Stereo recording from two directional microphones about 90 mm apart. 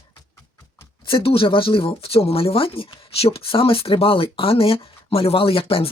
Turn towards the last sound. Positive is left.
turn(degrees=90)